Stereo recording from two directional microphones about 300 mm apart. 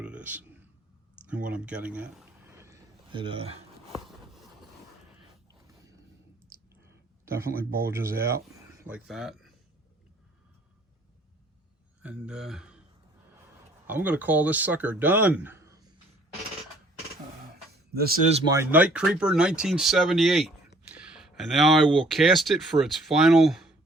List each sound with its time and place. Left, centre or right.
0.0 s a sound: centre
1.3 s speech: centre
2.5 s a sound: centre
5.5 s a sound: centre
6.5 s clicking: centre
7.3 s speech: centre
8.8 s speech: centre
12.0 s speech: centre
13.8 s speech: centre
18.0 s speech: right
18.4 s speech: centre